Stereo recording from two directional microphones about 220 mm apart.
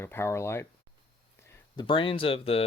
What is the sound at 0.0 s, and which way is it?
Speech, 10° left (ahead or behind).